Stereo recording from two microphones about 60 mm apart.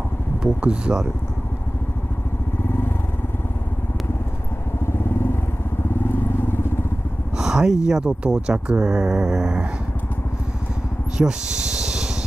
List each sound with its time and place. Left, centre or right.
0.4 s speech: centre
4.9 s vehicle: left
7.3 s speech: centre
11.1 s speech: centre